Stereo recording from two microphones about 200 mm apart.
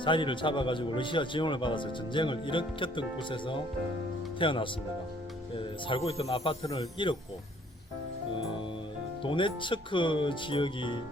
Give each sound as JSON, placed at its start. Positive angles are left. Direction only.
{"t": 0.0, "sound": "a man's voice", "side_deg": 25}
{"t": 9.2, "sound": "a man's voice", "side_deg": 25}